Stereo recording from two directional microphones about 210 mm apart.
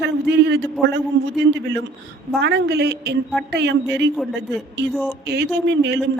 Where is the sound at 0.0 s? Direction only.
55° right (ahead or behind).